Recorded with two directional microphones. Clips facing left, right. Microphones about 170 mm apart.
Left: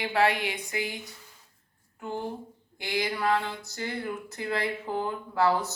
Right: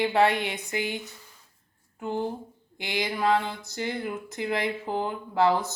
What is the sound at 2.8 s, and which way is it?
A woman's voice, 20° right (ahead or behind).